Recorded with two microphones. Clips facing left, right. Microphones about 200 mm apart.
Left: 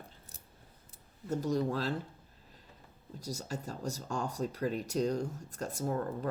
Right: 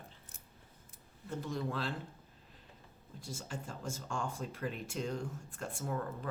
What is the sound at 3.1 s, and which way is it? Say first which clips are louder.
Speech: left 5 dB; 40° left (ahead or behind).